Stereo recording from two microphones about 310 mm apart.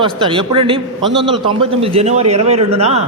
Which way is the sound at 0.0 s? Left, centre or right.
Centre.